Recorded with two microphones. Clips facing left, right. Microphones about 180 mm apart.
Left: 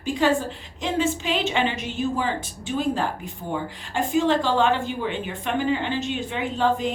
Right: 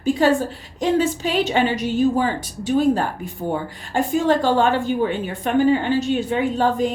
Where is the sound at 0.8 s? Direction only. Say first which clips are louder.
Right 5 dB; 45° right (ahead or behind).